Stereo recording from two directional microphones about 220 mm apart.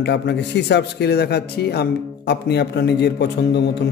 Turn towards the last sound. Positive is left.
turn(degrees=50)  # may be behind; listen again after turning